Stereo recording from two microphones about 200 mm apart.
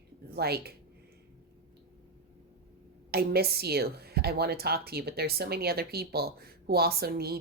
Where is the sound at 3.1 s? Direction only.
50° right (ahead or behind).